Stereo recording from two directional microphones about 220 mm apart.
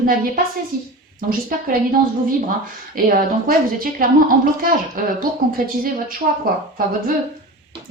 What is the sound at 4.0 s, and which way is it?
Speech, 40° right (ahead or behind).